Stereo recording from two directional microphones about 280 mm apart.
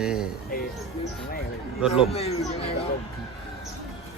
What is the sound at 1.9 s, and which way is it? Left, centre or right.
Speech, left.